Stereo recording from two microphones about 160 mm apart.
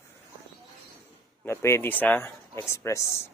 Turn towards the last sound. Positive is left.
turn(degrees=20)  # may be behind; listen again after turning